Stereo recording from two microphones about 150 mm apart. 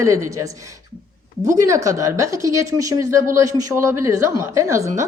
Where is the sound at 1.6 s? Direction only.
20° right (ahead or behind).